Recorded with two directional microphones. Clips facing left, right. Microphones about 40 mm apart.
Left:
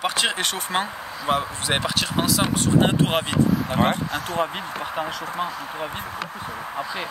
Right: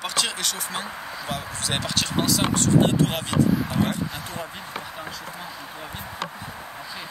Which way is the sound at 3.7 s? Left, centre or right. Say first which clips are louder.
Left 4 dB; left.